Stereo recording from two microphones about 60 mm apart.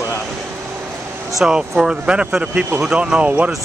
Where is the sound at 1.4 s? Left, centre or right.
Centre.